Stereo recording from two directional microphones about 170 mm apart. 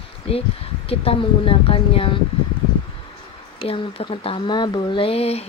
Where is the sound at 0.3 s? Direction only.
35° left (ahead or behind).